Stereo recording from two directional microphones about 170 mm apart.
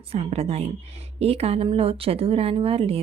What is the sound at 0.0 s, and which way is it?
Speech, 40° right (ahead or behind).